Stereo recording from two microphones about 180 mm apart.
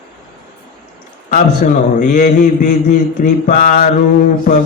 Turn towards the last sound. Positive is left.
turn(degrees=45)  # may be behind; listen again after turning